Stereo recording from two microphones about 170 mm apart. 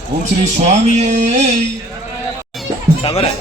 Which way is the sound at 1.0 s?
45° right (ahead or behind).